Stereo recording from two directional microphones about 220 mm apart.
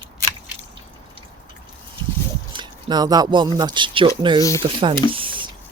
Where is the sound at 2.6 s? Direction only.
20° right (ahead or behind).